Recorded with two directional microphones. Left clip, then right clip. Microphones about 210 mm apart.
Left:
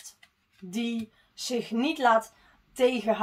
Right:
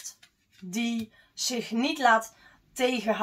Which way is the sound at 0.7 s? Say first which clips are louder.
Right 1 dB; 35° left (ahead or behind).